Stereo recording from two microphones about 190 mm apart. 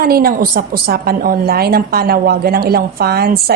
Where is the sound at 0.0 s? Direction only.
50° right (ahead or behind).